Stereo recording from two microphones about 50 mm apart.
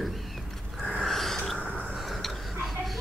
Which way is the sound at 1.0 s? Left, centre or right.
Centre.